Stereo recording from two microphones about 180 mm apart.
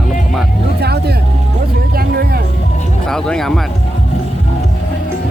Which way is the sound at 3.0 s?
5° left (ahead or behind).